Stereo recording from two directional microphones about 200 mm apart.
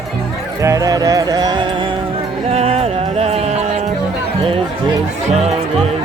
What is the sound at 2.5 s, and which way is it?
Music, 30° right (ahead or behind).